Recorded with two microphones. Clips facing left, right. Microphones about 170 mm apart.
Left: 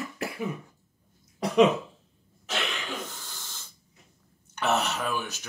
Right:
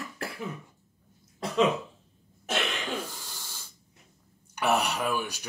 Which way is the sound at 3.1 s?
10° right (ahead or behind).